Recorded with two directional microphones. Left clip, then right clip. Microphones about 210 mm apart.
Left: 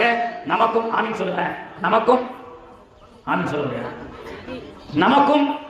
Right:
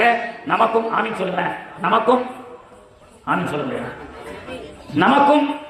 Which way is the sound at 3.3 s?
25° right (ahead or behind).